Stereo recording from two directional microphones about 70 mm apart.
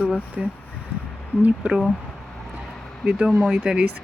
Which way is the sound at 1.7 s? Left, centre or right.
Centre.